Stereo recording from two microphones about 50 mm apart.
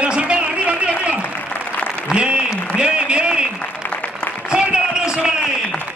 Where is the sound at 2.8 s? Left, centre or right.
Centre.